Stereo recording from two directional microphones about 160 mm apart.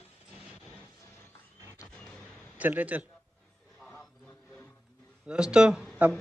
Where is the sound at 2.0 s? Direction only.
5° left (ahead or behind).